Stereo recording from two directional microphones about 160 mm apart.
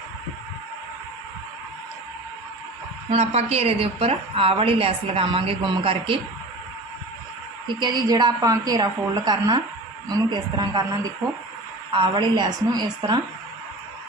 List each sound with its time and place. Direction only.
3.1 s a woman's voice: 40° right (ahead or behind)
7.8 s a woman's voice: 25° right (ahead or behind)
11.9 s a woman's voice: 25° right (ahead or behind)